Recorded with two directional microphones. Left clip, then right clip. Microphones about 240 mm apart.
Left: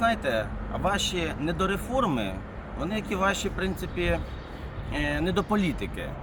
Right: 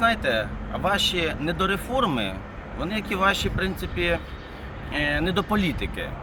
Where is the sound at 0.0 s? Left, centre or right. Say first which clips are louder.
Right 3 dB; centre.